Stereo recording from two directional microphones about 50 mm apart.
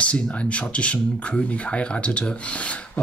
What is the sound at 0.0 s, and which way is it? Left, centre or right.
Speech, left.